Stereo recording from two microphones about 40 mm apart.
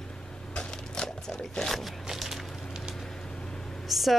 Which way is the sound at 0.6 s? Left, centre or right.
Left.